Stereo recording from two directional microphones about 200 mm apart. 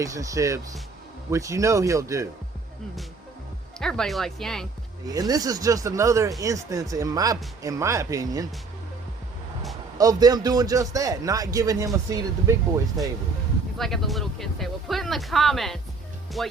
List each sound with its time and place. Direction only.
0.0 s a man's voice: 15° right (ahead or behind)
3.8 s speech: 5° left (ahead or behind)
5.0 s a man's voice: 20° right (ahead or behind)
10.0 s a man's voice: 20° right (ahead or behind)
13.7 s speech: centre (ahead or behind)